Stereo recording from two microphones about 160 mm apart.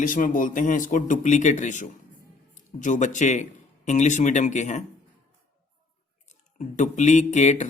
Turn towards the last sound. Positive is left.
turn(degrees=45)  # may be behind; listen again after turning